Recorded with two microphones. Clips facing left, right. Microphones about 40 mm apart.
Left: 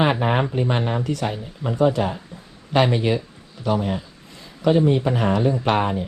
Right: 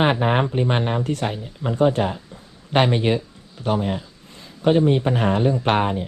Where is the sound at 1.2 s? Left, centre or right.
Right.